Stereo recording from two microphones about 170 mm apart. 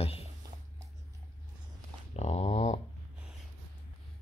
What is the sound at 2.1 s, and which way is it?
Dog, 40° left (ahead or behind).